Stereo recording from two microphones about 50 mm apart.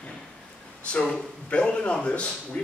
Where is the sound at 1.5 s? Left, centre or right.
Left.